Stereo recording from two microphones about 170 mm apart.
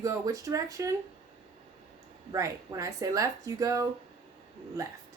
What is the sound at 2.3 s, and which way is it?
A woman's voice, 20° right (ahead or behind).